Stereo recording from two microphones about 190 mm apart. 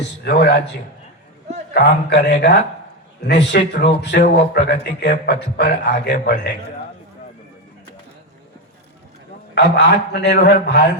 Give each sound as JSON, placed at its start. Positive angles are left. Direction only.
{"t": 0.0, "sound": "a man's voice", "side_deg": 65}
{"t": 9.6, "sound": "speech", "side_deg": 60}